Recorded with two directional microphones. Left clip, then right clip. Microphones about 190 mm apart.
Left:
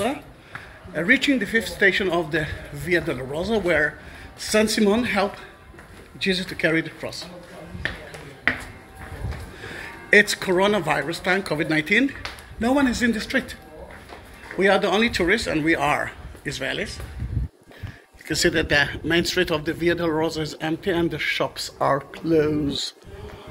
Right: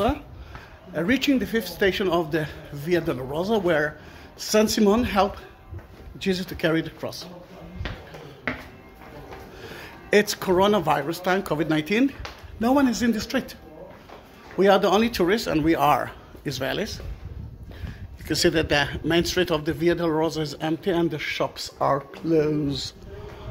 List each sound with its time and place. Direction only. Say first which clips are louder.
0.9 s speech: left 3 dB; 15° right (ahead or behind)
9.6 s speech: left 4 dB; 20° right (ahead or behind)
14.6 s speech: even; 20° right (ahead or behind)
18.2 s speech: left 1 dB; 20° right (ahead or behind); by 22.8 s centre (ahead or behind)